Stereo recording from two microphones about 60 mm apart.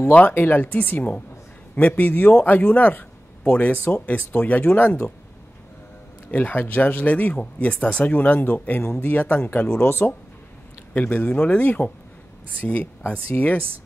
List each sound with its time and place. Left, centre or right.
0.1 s speech: left
6.3 s speech: left
10.9 s speech: left